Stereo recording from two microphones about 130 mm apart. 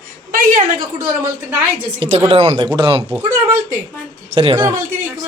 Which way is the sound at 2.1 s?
55° right (ahead or behind).